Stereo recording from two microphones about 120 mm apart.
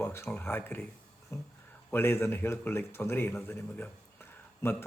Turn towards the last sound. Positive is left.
turn(degrees=15)  # may be behind; listen again after turning